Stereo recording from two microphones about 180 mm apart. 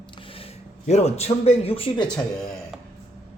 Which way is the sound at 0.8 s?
35° left (ahead or behind).